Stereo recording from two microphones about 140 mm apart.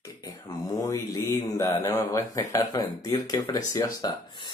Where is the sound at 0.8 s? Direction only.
20° left (ahead or behind).